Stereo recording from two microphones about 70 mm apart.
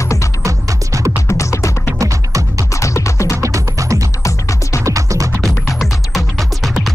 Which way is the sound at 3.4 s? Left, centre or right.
Right.